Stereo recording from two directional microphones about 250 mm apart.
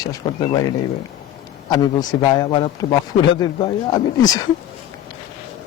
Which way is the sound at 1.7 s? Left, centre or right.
Centre.